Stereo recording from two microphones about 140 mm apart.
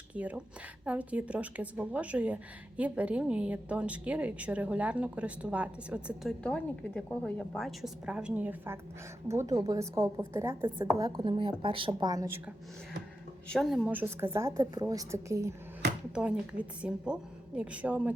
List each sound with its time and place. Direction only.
0.1 s a woman's voice: 10° right (ahead or behind)
6.4 s a woman's voice: 10° left (ahead or behind); by 11.3 s 25° right (ahead or behind)
11.3 s speech: 35° right (ahead or behind)
13.5 s a woman's voice: centre (ahead or behind); by 15.5 s 20° right (ahead or behind)
16.1 s a woman's voice: 5° right (ahead or behind)